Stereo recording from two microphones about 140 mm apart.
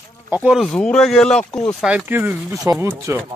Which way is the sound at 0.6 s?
5° left (ahead or behind).